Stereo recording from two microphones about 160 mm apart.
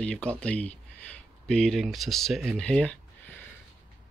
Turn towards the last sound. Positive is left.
turn(degrees=5)  # may be behind; listen again after turning